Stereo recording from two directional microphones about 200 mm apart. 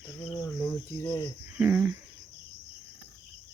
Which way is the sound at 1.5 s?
10° right (ahead or behind).